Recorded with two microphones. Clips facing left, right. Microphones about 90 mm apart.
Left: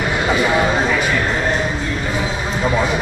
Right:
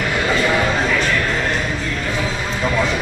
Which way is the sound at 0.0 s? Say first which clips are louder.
Left 1 dB; 15° left (ahead or behind).